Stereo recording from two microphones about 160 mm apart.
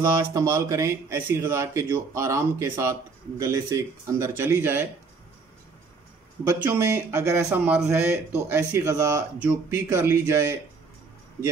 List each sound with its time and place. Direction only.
0.0 s speech: 15° right (ahead or behind)
6.4 s speech: 20° right (ahead or behind)
8.5 s speech: 20° right (ahead or behind)